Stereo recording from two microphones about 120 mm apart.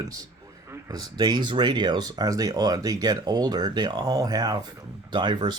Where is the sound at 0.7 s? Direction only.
30° right (ahead or behind).